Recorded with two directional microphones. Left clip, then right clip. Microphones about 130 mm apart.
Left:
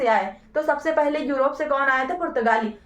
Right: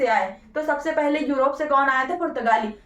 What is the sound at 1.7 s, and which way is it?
Speech, 25° left (ahead or behind).